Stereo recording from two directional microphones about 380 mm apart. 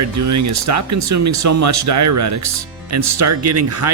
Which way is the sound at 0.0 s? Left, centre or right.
Right.